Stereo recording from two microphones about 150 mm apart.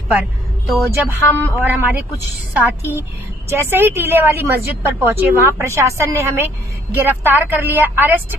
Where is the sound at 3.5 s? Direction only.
15° right (ahead or behind).